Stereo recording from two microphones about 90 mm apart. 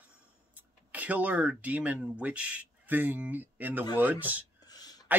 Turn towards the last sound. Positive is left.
turn(degrees=-20)  # may be behind; listen again after turning